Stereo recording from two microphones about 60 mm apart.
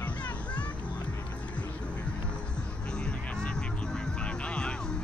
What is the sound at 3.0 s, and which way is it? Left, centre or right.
Music, centre.